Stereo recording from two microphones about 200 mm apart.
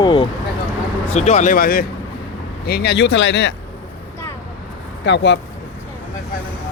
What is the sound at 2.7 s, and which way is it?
Speech, 55° left (ahead or behind).